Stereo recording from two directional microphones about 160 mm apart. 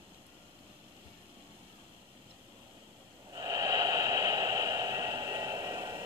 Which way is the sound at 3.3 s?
20° right (ahead or behind).